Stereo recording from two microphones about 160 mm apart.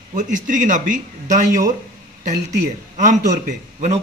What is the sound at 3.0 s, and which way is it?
Speech, 50° right (ahead or behind).